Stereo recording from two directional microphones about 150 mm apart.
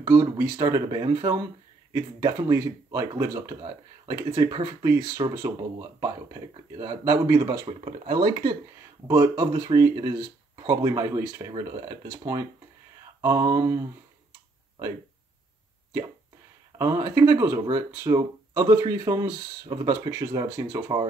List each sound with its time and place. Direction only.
0.0 s speech: 30° right (ahead or behind)
7.8 s speech: 40° right (ahead or behind)
8.3 s speech: 25° right (ahead or behind)
9.0 s speech: 15° right (ahead or behind)
16.7 s speech: 20° right (ahead or behind)